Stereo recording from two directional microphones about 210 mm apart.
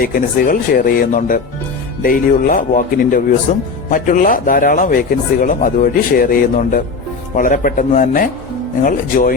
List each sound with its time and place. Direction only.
0.0 s speech: 40° left (ahead or behind)